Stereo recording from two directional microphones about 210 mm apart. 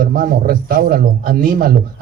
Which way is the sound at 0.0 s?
45° right (ahead or behind).